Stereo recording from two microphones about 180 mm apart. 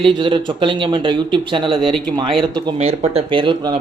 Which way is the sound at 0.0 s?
30° right (ahead or behind).